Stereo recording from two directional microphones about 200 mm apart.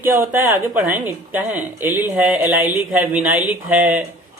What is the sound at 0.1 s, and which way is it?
Speech, 10° right (ahead or behind).